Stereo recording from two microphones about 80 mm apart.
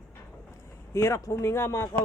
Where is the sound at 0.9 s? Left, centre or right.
Left.